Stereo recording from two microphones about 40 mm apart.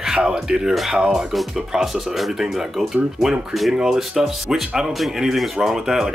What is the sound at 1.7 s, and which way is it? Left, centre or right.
A man's voice, centre.